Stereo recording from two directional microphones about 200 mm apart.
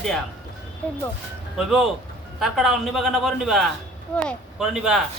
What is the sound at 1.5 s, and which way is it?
A man's voice, centre (ahead or behind).